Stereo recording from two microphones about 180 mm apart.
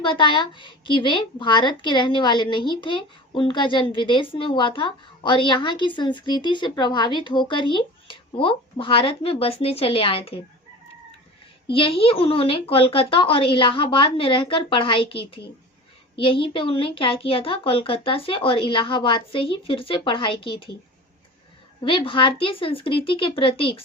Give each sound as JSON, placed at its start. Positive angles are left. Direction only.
{"t": 0.0, "sound": "speech", "side_deg": 25}
{"t": 11.7, "sound": "speech", "side_deg": 30}
{"t": 21.8, "sound": "speech", "side_deg": 30}